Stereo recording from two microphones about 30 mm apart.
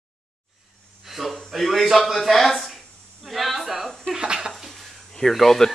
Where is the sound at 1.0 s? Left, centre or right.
Centre.